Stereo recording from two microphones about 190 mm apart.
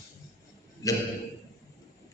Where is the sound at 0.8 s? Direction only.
20° left (ahead or behind).